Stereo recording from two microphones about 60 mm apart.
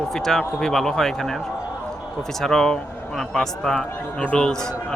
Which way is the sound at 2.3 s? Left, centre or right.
Centre.